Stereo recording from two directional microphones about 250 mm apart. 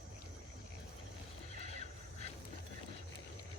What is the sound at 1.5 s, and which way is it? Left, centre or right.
Neigh, left.